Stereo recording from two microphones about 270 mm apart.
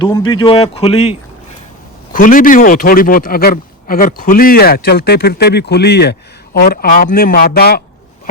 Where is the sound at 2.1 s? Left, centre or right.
Left.